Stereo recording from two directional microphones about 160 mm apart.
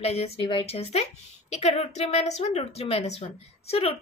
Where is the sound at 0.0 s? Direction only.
40° left (ahead or behind).